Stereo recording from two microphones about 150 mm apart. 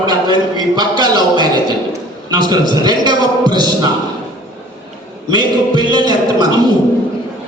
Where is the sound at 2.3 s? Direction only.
30° right (ahead or behind).